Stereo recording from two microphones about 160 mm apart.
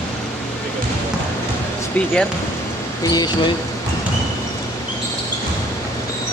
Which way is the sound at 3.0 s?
25° left (ahead or behind).